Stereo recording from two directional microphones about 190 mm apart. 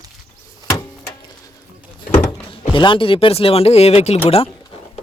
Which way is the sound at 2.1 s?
10° left (ahead or behind).